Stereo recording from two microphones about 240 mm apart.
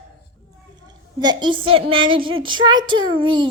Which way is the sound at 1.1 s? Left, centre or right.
Centre.